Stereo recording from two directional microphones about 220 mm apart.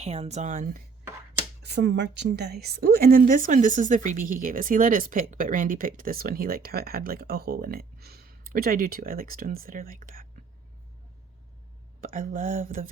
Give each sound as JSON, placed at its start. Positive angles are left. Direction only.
{"t": 0.0, "sound": "a woman's voice", "side_deg": -30}
{"t": 1.6, "sound": "a woman's voice", "side_deg": -50}
{"t": 11.9, "sound": "a woman's voice", "side_deg": -35}